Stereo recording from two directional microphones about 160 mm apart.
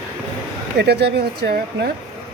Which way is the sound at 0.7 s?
90° right.